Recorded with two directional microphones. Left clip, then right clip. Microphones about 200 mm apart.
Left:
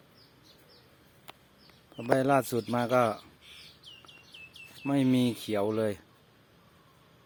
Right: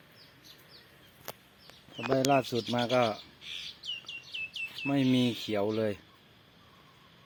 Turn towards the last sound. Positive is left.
turn(degrees=5)  # may be behind; listen again after turning